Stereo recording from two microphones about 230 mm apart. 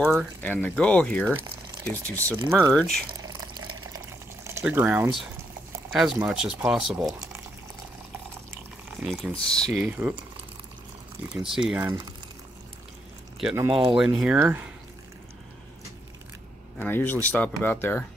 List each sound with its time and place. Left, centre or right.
0.0 s speech: centre
0.4 s speech: centre
2.3 s speech: centre
3.1 s a sound: centre
4.5 s speech: centre
7.1 s a sound: centre
9.0 s speech: centre
11.2 s speech: centre
13.6 s speech: right
14.2 s speech: centre
16.7 s speech: centre